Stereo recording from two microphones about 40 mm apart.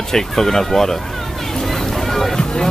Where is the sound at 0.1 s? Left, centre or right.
Centre.